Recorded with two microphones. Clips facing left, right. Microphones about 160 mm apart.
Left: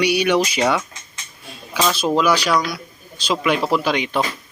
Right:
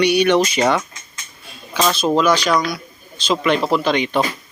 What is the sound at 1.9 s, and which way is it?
Speech, 10° left (ahead or behind).